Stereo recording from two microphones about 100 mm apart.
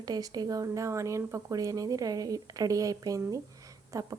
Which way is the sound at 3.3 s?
35° right (ahead or behind).